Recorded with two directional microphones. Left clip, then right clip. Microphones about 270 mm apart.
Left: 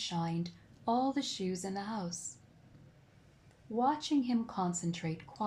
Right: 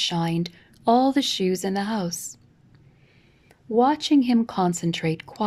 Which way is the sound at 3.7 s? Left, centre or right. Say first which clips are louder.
Right 12 dB; right.